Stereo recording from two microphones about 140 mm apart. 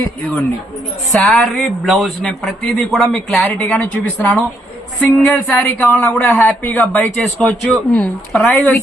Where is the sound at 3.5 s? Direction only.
15° left (ahead or behind).